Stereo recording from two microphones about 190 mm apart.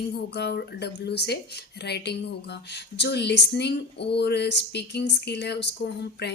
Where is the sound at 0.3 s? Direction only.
60° left (ahead or behind).